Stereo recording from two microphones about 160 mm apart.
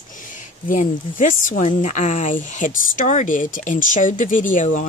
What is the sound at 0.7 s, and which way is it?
Speech, 55° left (ahead or behind).